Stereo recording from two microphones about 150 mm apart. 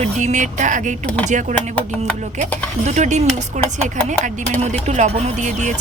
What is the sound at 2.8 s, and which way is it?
Speech, 50° right (ahead or behind).